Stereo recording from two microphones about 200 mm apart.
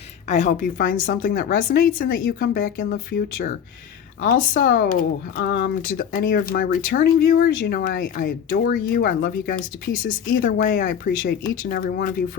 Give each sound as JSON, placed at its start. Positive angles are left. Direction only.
{"t": 0.3, "sound": "speech", "side_deg": 35}
{"t": 5.4, "sound": "speech", "side_deg": 60}